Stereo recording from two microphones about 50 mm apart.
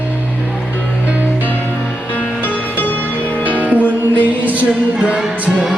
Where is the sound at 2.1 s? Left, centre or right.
Left.